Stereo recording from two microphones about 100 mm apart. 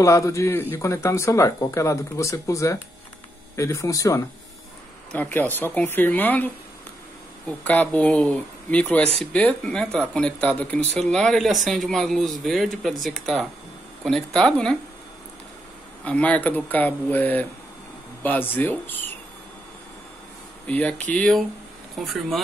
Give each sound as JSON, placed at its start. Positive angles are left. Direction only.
{"t": 0.0, "sound": "speech", "side_deg": 30}
{"t": 5.1, "sound": "speech", "side_deg": 15}
{"t": 16.0, "sound": "speech", "side_deg": 15}
{"t": 20.6, "sound": "speech", "side_deg": 15}
{"t": 21.9, "sound": "speech", "side_deg": 0}